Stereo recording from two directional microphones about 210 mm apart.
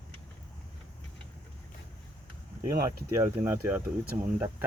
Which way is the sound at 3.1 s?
10° right (ahead or behind).